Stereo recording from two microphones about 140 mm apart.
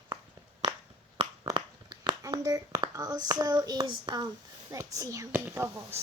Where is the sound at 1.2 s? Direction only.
45° right (ahead or behind).